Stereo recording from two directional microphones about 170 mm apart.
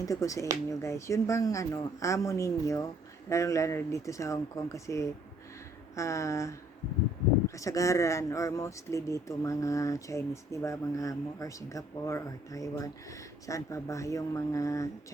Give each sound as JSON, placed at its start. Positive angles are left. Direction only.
{"t": 0.0, "sound": "speech", "side_deg": 20}